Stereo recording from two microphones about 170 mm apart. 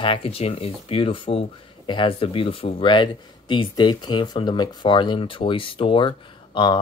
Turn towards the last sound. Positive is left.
turn(degrees=25)  # may be behind; listen again after turning